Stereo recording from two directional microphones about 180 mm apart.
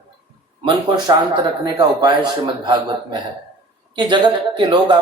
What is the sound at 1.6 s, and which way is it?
A man's voice, 20° right (ahead or behind).